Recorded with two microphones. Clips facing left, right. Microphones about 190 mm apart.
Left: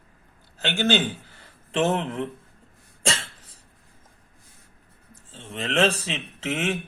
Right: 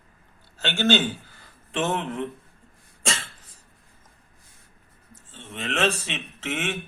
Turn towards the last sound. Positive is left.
turn(degrees=35)  # may be behind; listen again after turning